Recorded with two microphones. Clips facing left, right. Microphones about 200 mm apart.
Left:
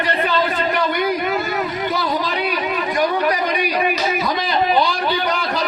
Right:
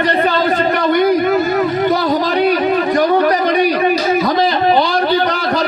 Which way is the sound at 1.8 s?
45° right (ahead or behind).